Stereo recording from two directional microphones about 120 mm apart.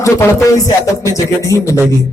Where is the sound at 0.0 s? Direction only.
25° left (ahead or behind).